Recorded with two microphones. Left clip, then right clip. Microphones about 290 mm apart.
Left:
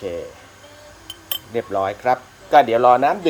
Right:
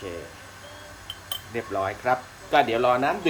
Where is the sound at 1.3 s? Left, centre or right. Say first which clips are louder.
Left 7 dB; left.